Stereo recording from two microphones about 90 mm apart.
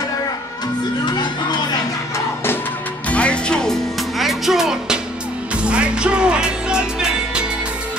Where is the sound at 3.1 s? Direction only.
15° left (ahead or behind); by 7.4 s 10° right (ahead or behind).